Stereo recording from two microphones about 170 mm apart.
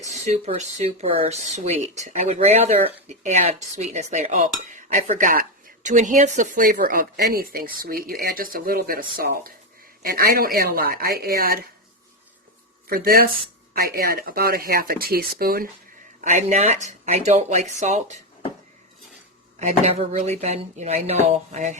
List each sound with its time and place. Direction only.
0.1 s speech: 40° right (ahead or behind); by 11.6 s 60° right (ahead or behind)
12.9 s speech: 60° right (ahead or behind)
16.2 s speech: 40° right (ahead or behind)
19.5 s speech: 40° right (ahead or behind)